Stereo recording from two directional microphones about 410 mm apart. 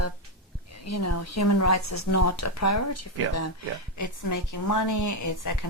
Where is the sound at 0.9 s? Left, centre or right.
Left.